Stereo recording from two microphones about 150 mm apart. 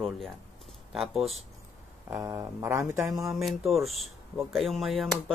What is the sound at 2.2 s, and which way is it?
Speech, 20° right (ahead or behind).